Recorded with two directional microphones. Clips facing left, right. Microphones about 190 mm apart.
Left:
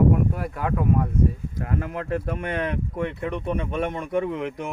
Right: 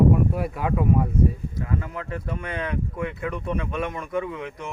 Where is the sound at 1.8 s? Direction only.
60° left (ahead or behind).